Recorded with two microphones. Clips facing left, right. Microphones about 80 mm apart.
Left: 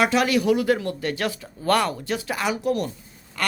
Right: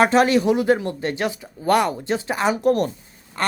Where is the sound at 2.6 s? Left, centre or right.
Right.